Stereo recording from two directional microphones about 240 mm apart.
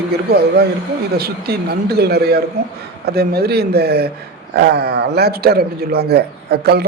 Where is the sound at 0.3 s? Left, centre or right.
Right.